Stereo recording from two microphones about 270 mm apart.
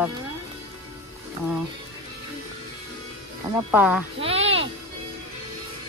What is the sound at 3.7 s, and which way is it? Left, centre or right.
Speech, centre.